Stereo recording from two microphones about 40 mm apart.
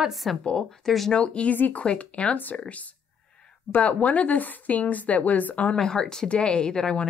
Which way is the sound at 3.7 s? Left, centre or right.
Left.